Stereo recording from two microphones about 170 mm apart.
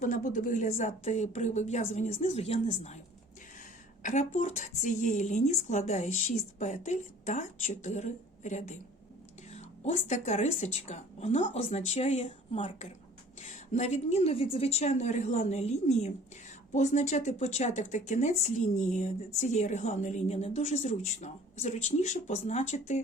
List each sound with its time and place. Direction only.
0.0 s a woman's voice: 45° left (ahead or behind)
4.0 s a woman's voice: 45° left (ahead or behind)